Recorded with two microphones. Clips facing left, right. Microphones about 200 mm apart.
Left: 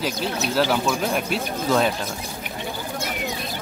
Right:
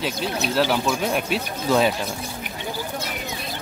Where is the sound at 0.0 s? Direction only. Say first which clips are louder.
Even; centre (ahead or behind).